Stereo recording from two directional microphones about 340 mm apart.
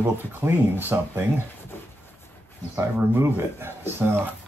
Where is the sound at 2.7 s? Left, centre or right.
Centre.